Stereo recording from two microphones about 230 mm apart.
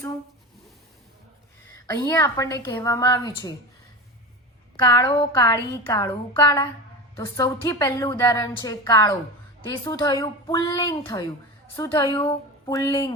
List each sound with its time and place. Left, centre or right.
1.7 s a woman's voice: centre
4.8 s a woman's voice: centre